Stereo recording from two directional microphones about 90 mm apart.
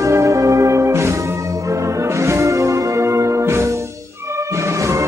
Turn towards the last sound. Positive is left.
turn(degrees=-35)  # may be behind; listen again after turning